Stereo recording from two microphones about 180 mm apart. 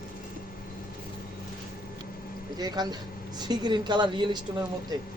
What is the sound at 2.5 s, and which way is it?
Speech, 20° right (ahead or behind).